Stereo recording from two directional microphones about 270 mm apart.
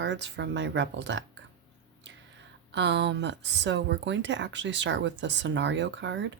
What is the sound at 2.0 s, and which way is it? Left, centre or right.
Whispering, right.